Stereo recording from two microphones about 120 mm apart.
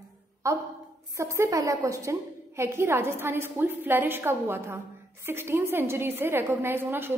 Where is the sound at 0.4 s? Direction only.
25° right (ahead or behind).